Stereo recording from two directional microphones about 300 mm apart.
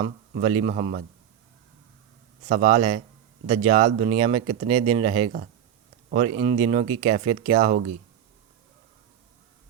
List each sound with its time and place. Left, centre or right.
0.0 s speech: centre
2.5 s speech: right